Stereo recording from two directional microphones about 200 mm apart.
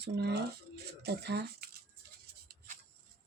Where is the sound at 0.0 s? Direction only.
55° right (ahead or behind).